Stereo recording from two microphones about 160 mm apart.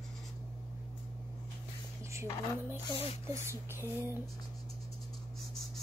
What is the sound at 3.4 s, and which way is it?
Speech, 15° right (ahead or behind).